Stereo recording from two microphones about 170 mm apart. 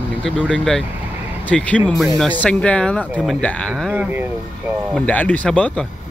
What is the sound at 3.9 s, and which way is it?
Speech, 10° right (ahead or behind).